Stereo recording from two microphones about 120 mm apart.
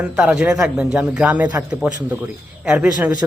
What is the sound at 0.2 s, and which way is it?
Speech, 5° right (ahead or behind).